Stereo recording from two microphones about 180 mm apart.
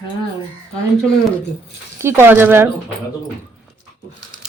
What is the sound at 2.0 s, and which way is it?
Speech, 15° right (ahead or behind).